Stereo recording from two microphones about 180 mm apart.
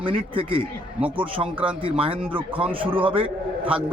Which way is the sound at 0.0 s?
30° right (ahead or behind).